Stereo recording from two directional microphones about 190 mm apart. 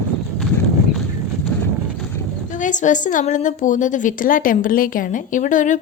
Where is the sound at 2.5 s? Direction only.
40° left (ahead or behind).